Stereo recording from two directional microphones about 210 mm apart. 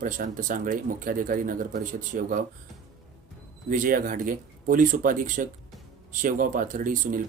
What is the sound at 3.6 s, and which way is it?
Speech, 40° right (ahead or behind).